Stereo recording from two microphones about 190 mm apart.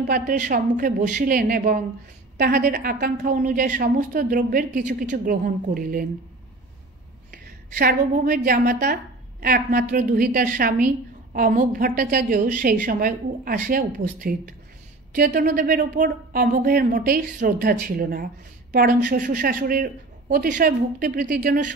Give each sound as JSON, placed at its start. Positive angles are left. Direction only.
{"t": 0.0, "sound": "speech", "side_deg": -50}
{"t": 7.2, "sound": "a woman's voice", "side_deg": -50}